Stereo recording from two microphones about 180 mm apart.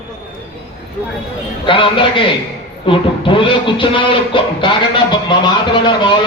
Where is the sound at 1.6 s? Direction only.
30° left (ahead or behind).